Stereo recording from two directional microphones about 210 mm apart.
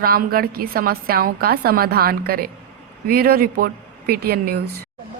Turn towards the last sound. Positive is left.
turn(degrees=-50)  # may be behind; listen again after turning